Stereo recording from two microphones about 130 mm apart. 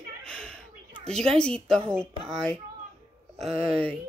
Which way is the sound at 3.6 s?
5° left (ahead or behind).